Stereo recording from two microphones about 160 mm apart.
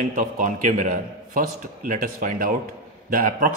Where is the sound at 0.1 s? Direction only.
55° right (ahead or behind).